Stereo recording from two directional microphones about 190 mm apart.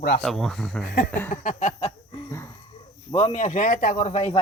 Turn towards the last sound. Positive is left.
turn(degrees=35)  # may be behind; listen again after turning